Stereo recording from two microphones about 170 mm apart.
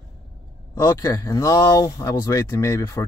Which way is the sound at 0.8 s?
15° left (ahead or behind).